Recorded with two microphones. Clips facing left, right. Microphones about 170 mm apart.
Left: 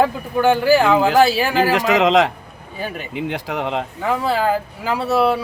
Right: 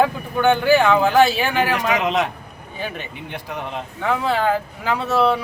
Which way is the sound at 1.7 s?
90° left.